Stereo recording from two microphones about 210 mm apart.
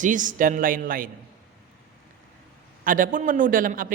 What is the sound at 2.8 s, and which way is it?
A woman's voice, 40° right (ahead or behind).